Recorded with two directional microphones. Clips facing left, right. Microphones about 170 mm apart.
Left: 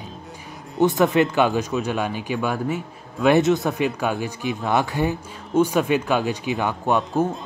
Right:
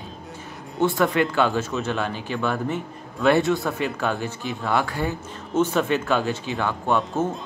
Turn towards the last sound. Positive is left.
turn(degrees=15)  # may be behind; listen again after turning